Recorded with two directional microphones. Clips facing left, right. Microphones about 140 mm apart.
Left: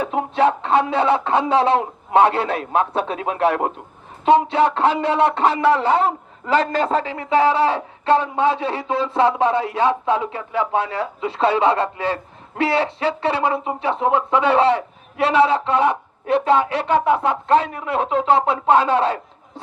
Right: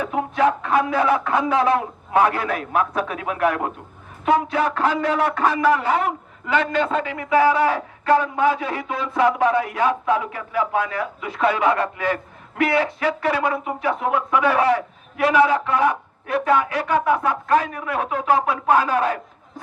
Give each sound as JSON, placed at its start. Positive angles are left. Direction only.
{"t": 0.0, "sound": "speech", "side_deg": 30}